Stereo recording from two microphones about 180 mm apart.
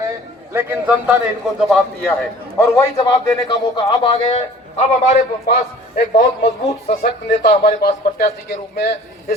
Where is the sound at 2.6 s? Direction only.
20° left (ahead or behind); by 5.2 s 40° left (ahead or behind).